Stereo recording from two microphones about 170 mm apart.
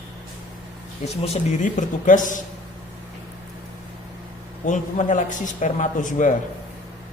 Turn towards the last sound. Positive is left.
turn(degrees=50)  # may be behind; listen again after turning